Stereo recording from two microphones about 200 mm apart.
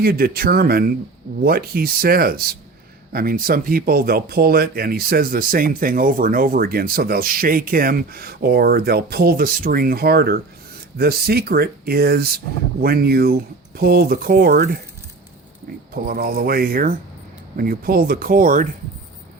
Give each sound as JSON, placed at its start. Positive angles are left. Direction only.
{"t": 0.0, "sound": "speech", "side_deg": -50}
{"t": 15.9, "sound": "speech", "side_deg": -50}